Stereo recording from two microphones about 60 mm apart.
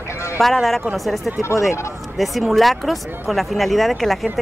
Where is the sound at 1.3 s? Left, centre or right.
Left.